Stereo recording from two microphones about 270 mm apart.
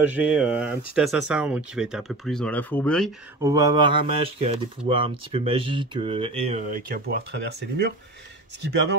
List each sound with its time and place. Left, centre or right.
0.0 s speech: centre
3.4 s speech: centre; by 7.9 s right